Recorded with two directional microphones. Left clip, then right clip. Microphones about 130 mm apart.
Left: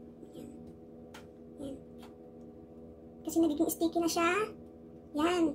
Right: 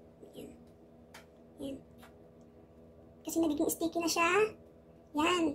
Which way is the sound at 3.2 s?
25° right (ahead or behind).